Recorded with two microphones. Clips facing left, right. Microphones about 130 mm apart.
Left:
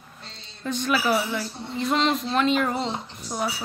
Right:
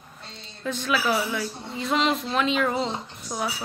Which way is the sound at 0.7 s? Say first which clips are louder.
Left 1 dB; centre (ahead or behind).